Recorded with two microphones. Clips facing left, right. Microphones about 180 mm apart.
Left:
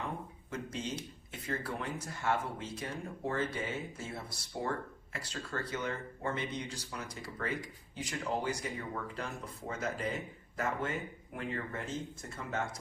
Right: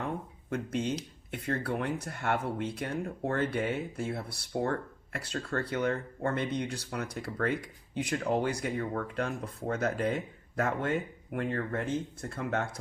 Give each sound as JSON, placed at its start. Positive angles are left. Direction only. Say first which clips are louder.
{"t": 0.5, "sound": "speech", "louder": "right 7 dB", "side_deg": -60}
{"t": 11.3, "sound": "speech", "louder": "right 7 dB", "side_deg": -60}